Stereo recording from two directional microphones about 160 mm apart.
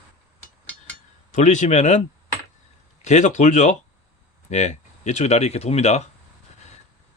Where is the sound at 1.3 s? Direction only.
50° left (ahead or behind).